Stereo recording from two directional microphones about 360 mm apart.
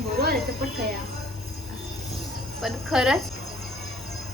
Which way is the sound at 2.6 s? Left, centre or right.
Centre.